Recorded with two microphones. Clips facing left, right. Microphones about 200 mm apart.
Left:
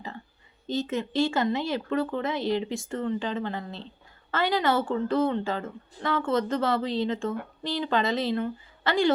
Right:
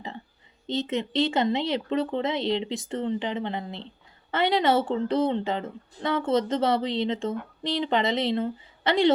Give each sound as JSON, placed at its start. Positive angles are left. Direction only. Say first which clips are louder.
{"t": 0.7, "sound": "speech", "louder": "right 1 dB", "side_deg": -20}